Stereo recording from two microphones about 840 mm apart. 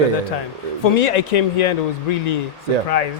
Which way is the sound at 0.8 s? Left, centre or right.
Left.